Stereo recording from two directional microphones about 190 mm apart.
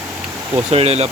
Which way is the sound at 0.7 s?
30° right (ahead or behind).